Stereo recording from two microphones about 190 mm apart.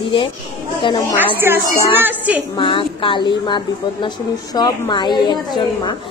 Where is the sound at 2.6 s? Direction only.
25° left (ahead or behind).